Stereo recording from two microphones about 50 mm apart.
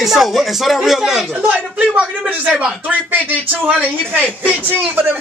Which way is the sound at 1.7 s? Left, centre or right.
Right.